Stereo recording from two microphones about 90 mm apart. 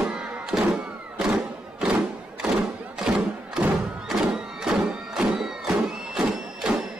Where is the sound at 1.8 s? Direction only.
10° right (ahead or behind).